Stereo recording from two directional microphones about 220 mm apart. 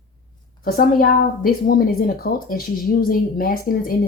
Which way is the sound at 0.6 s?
40° left (ahead or behind).